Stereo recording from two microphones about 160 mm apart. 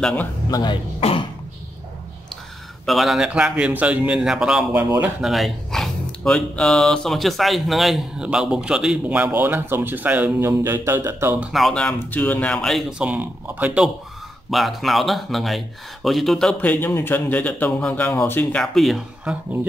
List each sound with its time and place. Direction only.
0.0 s speech: 10° left (ahead or behind)
0.5 s speech: 25° left (ahead or behind)
2.8 s speech: centre (ahead or behind)
11.5 s speech: 5° left (ahead or behind)
13.0 s speech: 10° right (ahead or behind)
16.8 s speech: 15° left (ahead or behind)